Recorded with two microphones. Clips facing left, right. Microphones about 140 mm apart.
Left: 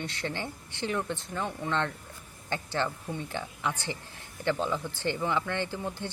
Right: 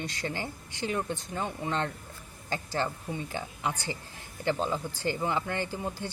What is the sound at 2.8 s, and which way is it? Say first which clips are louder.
A woman's voice: even; 10° right (ahead or behind).